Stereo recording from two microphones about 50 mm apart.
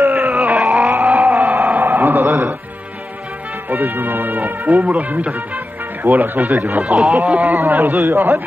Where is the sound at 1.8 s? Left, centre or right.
Right.